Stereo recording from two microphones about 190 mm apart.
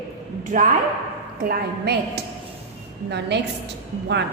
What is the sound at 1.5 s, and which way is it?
A woman's voice, 60° right (ahead or behind).